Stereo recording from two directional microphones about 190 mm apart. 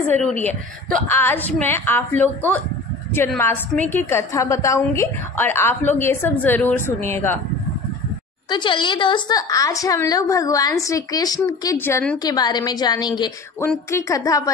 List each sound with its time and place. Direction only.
0.1 s a woman's voice: 5° left (ahead or behind)
8.5 s a woman's voice: 25° left (ahead or behind); by 12.2 s 10° left (ahead or behind)
12.2 s a woman's voice: 20° left (ahead or behind)